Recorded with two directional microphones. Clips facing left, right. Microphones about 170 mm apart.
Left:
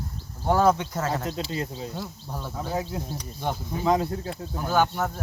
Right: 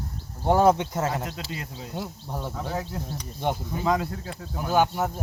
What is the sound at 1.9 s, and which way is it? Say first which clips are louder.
Speech: right 2 dB; 20° right (ahead or behind).